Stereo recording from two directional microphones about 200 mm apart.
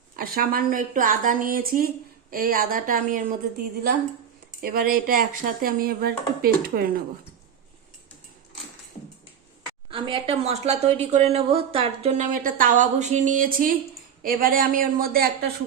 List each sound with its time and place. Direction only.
0.2 s speech: 50° right (ahead or behind)
4.6 s speech: 45° right (ahead or behind)
9.9 s speech: 25° right (ahead or behind); by 15.4 s 50° right (ahead or behind)